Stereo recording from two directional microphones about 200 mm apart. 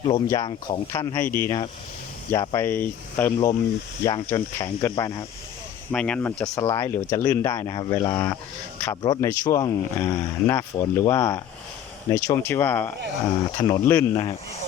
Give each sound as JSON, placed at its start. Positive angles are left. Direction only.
{"t": 0.0, "sound": "speech", "side_deg": 20}
{"t": 5.9, "sound": "speech", "side_deg": 5}